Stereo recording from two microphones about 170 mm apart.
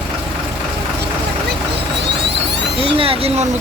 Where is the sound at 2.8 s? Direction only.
30° right (ahead or behind).